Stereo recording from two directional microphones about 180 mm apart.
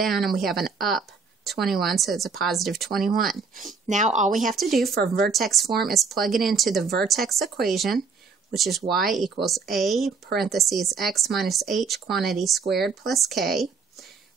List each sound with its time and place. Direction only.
0.0 s speech: centre (ahead or behind)
3.8 s speech: 40° right (ahead or behind)
4.6 s speech: centre (ahead or behind)